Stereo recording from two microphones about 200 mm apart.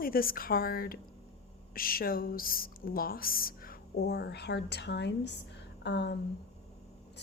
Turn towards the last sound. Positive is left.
turn(degrees=60)  # may be behind; listen again after turning